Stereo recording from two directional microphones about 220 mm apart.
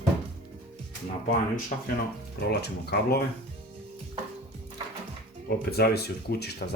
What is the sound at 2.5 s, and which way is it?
Speech, 45° left (ahead or behind).